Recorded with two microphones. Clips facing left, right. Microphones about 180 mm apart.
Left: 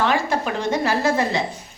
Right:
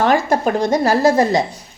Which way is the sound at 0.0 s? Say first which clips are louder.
Right 6 dB; 45° right (ahead or behind).